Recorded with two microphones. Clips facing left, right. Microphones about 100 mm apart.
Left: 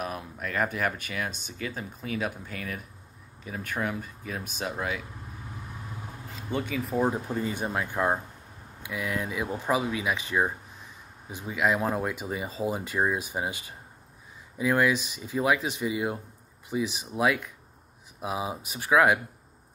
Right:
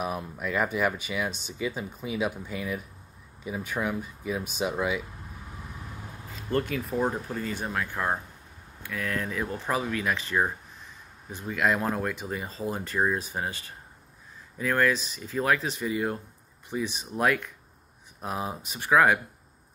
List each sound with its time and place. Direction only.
0.0 s speech: 5° right (ahead or behind)
6.5 s speech: centre (ahead or behind)
7.2 s speech: 20° left (ahead or behind)